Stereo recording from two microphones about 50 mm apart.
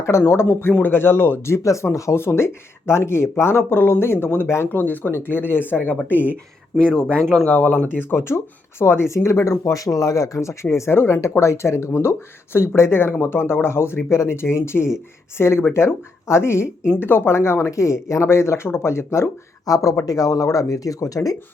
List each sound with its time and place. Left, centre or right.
0.2 s speech: left
0.7 s speech: left
4.4 s speech: left
4.7 s speech: left
6.7 s speech: centre
7.4 s speech: left
8.1 s speech: left
9.1 s speech: left
11.2 s speech: left
20.4 s speech: left